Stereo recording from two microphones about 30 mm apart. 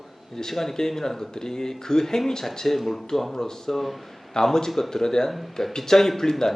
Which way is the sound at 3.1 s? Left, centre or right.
Centre.